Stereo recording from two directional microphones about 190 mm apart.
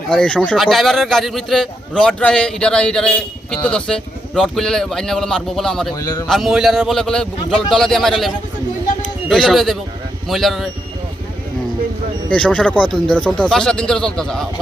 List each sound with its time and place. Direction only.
0.1 s a man's voice: 5° left (ahead or behind)
5.9 s a man's voice: 20° left (ahead or behind)
6.2 s a man's voice: centre (ahead or behind)
9.3 s a man's voice: centre (ahead or behind)
12.3 s a man's voice: 5° left (ahead or behind)